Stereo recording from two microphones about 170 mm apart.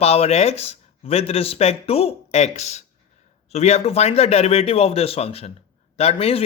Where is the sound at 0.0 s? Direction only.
35° left (ahead or behind).